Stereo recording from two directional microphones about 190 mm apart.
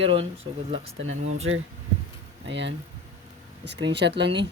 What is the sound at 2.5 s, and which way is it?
Speech, 70° right (ahead or behind).